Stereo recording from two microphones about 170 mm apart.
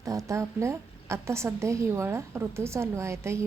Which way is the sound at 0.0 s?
20° right (ahead or behind).